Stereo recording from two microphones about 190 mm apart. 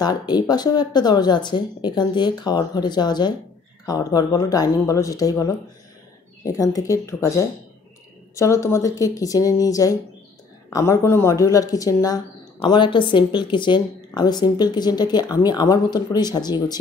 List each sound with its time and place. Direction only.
0.0 s speech: 20° left (ahead or behind)